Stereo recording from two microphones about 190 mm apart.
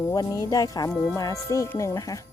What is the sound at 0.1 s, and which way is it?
Speech, 20° left (ahead or behind).